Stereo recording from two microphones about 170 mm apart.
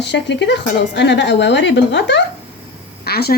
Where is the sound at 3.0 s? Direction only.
70° left (ahead or behind).